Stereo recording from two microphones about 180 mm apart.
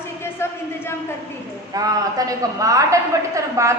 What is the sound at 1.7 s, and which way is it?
A woman's voice, 20° right (ahead or behind).